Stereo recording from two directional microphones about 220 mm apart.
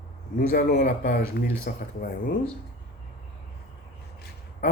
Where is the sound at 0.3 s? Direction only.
45° left (ahead or behind).